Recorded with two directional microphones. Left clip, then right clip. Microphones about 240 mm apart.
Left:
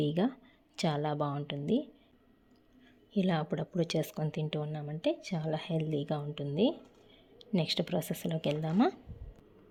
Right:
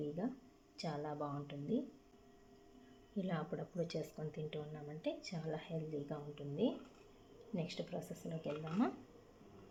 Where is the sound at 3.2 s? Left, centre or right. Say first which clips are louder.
Left 10 dB; left.